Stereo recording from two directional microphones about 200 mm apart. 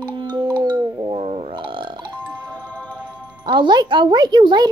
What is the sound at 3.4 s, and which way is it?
A child's voice, 25° right (ahead or behind).